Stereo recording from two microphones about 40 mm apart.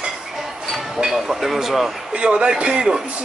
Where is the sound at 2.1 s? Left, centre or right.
Right.